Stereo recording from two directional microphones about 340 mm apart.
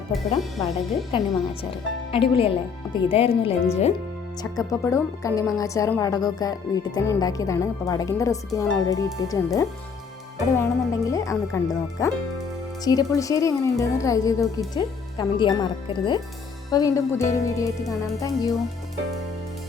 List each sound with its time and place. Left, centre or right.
0.3 s speech: centre
2.1 s speech: centre